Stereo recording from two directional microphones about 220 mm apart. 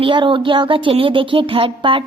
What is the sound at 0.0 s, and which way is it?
A woman's voice, 25° right (ahead or behind).